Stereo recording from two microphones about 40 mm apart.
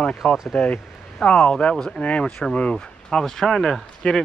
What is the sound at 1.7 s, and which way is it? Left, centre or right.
Speech, centre.